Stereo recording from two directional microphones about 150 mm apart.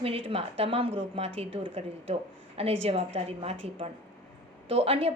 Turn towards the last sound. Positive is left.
turn(degrees=-40)  # may be behind; listen again after turning